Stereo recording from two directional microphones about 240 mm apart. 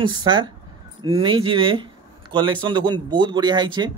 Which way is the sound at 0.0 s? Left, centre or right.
Centre.